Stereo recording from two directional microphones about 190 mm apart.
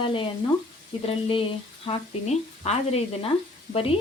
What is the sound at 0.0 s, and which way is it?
Speech, 25° left (ahead or behind).